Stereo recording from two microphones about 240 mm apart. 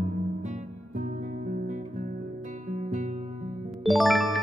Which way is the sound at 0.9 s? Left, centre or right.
Right.